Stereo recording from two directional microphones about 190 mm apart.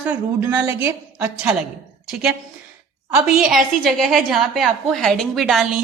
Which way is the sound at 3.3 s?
Centre (ahead or behind).